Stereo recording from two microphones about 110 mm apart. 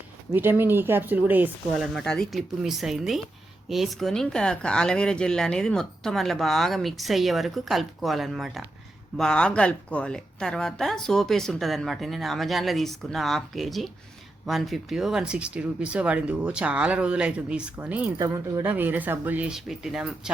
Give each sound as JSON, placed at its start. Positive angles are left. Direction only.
{"t": 0.3, "sound": "speech", "side_deg": -20}
{"t": 1.7, "sound": "speech", "side_deg": 0}